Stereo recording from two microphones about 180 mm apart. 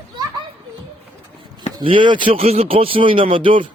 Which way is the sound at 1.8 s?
25° right (ahead or behind).